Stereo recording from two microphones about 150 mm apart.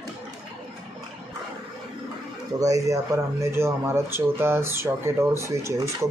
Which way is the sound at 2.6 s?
20° right (ahead or behind).